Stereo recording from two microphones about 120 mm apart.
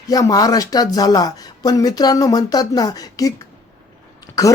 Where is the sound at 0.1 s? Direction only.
30° left (ahead or behind).